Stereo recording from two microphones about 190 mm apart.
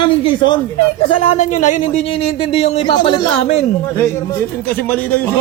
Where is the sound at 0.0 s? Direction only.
25° left (ahead or behind).